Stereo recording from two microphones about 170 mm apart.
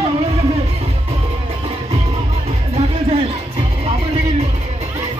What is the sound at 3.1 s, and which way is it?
Music, 35° right (ahead or behind).